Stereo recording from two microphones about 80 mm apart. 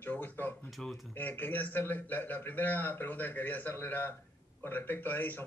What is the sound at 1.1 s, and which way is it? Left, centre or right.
A man's voice, left.